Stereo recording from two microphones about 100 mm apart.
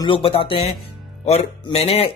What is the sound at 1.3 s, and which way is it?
Speech, 90° left.